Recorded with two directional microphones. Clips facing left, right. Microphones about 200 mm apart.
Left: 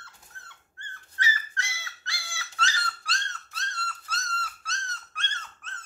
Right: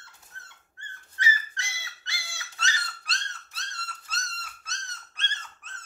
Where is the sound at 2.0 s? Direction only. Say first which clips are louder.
Left 3 dB; 20° right (ahead or behind).